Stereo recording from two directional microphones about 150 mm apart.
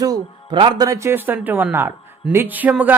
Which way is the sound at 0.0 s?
30° right (ahead or behind).